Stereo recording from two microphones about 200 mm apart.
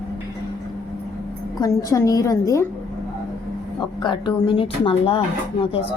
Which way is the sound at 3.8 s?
25° left (ahead or behind).